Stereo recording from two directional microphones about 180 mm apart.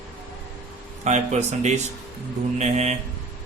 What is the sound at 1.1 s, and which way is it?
Speech, 40° right (ahead or behind).